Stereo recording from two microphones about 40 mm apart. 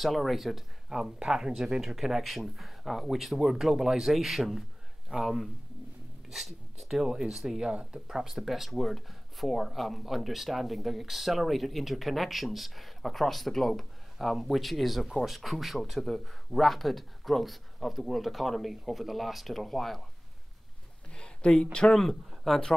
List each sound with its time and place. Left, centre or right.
0.0 s speech: centre
1.8 s speech: centre
21.2 s a sound: left
21.9 s speech: centre